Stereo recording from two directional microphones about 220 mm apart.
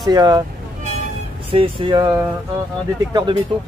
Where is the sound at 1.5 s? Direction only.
25° right (ahead or behind).